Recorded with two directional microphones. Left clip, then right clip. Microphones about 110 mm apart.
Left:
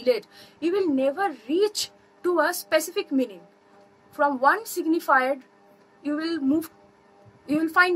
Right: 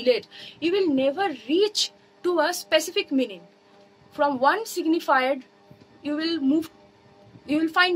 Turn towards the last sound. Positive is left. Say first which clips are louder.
# left 1 dB
turn(degrees=-20)  # may be behind; listen again after turning